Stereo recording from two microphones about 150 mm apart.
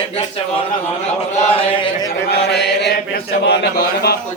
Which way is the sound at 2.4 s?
90° left.